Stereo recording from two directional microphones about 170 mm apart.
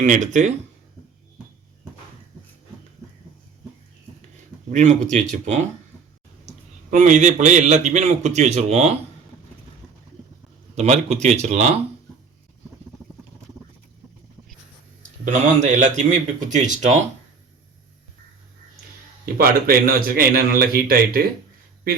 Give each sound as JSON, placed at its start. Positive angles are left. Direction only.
{"t": 0.0, "sound": "a man's voice", "side_deg": -45}
{"t": 4.7, "sound": "a man's voice", "side_deg": -45}
{"t": 6.9, "sound": "a man's voice", "side_deg": -45}
{"t": 10.8, "sound": "speech", "side_deg": -40}
{"t": 15.2, "sound": "a man's voice", "side_deg": -45}
{"t": 19.2, "sound": "a man's voice", "side_deg": -60}